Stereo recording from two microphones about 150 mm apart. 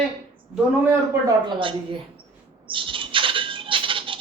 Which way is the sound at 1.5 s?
35° right (ahead or behind).